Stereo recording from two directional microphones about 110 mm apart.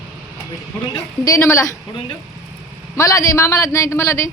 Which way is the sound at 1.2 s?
30° left (ahead or behind).